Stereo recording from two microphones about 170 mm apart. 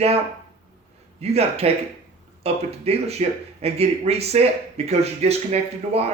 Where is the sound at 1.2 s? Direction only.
35° right (ahead or behind).